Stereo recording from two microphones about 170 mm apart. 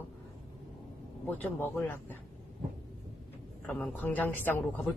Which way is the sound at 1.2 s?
10° left (ahead or behind).